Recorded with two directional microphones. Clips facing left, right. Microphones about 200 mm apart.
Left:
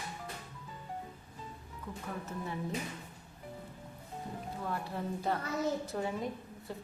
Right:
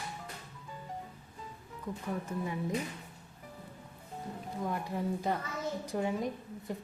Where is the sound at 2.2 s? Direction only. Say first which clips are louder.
Right 3 dB; 10° right (ahead or behind).